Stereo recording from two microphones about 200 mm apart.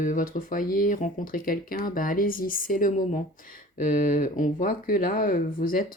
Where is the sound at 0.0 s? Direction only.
40° left (ahead or behind).